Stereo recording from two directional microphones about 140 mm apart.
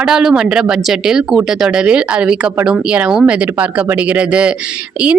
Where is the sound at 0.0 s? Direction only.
5° right (ahead or behind).